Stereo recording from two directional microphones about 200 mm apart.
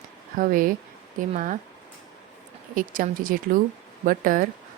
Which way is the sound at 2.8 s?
40° right (ahead or behind).